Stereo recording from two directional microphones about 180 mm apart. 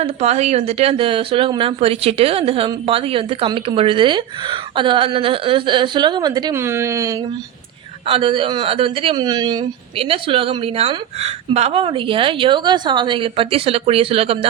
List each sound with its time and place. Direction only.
0.0 s a woman's voice: 35° right (ahead or behind); by 7.2 s 15° right (ahead or behind)
8.0 s a woman's voice: 30° right (ahead or behind)